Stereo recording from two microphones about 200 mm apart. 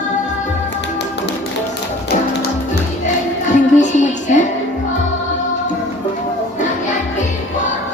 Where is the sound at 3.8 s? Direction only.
35° left (ahead or behind).